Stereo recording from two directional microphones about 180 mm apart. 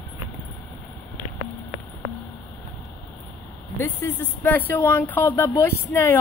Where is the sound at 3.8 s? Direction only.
10° left (ahead or behind).